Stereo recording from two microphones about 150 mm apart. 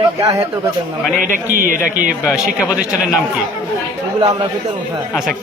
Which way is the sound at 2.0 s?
5° right (ahead or behind).